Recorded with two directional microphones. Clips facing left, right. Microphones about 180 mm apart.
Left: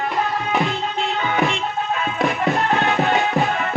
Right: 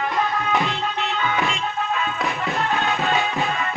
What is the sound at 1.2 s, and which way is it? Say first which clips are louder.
Music: left 4 dB; 45° left (ahead or behind).